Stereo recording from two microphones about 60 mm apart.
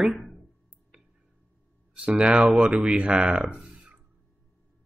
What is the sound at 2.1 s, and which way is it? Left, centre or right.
Speech, centre.